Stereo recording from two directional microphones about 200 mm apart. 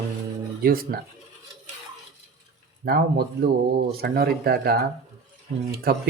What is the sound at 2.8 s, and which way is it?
Speech, 50° right (ahead or behind).